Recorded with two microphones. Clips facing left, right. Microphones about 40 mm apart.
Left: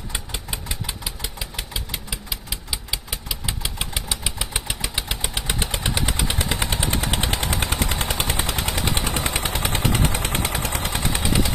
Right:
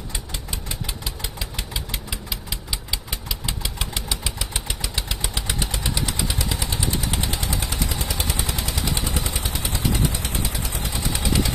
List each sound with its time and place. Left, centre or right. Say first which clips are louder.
0.1 s engine: left 3 dB; centre
0.7 s engine: even; centre; by 5.8 s left
5.9 s vehicle: left 2 dB; left
11.2 s vehicle: right 1 dB; centre